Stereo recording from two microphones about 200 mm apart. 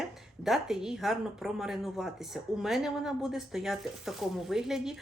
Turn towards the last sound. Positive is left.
turn(degrees=0)  # may be behind; listen again after turning